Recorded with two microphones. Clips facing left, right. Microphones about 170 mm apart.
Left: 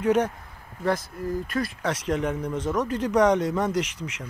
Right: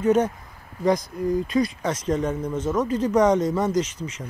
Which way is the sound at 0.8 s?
15° right (ahead or behind).